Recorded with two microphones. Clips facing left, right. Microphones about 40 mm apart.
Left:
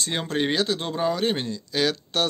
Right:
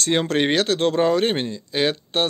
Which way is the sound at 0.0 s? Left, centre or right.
Right.